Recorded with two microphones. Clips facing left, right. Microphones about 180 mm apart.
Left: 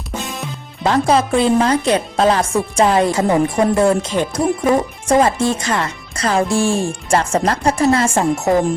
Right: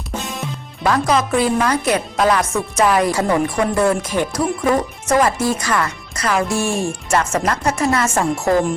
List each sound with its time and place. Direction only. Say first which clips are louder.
0.1 s music: left 1 dB; centre (ahead or behind)
0.9 s speech: left 2 dB; 30° left (ahead or behind)